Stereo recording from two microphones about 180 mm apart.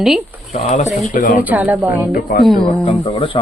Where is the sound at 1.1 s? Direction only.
50° left (ahead or behind).